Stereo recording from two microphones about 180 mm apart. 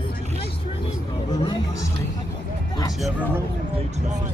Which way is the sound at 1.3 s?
25° left (ahead or behind).